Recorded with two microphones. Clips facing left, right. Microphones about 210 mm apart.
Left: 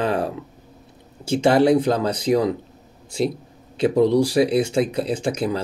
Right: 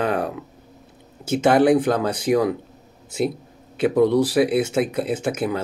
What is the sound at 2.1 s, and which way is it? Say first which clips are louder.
Speech: left 1 dB; 5° right (ahead or behind).